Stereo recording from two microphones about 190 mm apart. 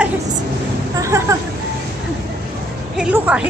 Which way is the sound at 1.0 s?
15° right (ahead or behind).